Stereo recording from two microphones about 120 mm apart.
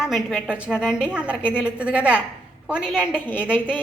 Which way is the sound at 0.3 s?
5° right (ahead or behind).